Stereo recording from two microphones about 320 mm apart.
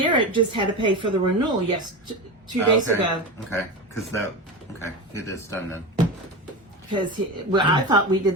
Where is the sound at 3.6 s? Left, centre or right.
Centre.